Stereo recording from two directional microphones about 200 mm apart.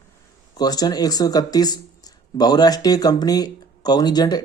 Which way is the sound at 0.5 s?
20° left (ahead or behind).